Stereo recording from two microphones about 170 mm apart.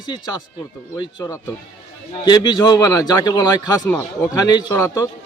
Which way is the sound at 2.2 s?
25° left (ahead or behind).